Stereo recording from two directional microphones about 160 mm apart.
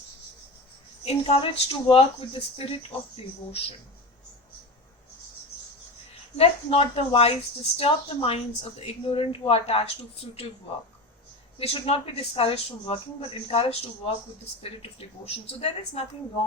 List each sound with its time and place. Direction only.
1.0 s a woman's voice: 35° left (ahead or behind)
6.3 s a woman's voice: 40° left (ahead or behind)
11.6 s a woman's voice: 35° left (ahead or behind)